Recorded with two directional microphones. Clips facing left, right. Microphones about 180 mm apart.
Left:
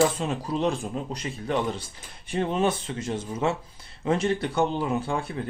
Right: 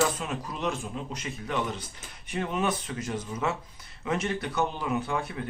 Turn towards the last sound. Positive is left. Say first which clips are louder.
# left 2 dB
turn(degrees=30)  # may be behind; listen again after turning